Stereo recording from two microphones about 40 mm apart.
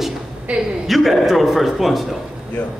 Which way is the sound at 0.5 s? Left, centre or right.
Right.